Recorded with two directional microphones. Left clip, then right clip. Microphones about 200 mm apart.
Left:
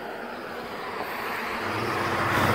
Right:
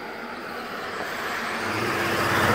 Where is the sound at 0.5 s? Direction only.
50° right (ahead or behind).